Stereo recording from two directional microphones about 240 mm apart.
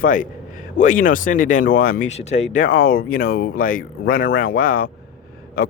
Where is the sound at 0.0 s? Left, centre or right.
Left.